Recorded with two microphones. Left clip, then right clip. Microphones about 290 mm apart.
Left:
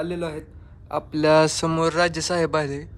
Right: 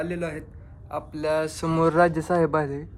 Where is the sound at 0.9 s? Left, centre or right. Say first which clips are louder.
Left 7 dB; left.